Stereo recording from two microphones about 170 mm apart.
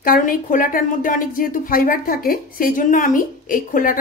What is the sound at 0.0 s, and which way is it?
Speech, 55° left (ahead or behind).